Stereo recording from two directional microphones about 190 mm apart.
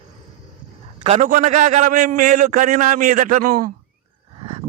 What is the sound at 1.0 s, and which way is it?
A man's voice, 40° right (ahead or behind).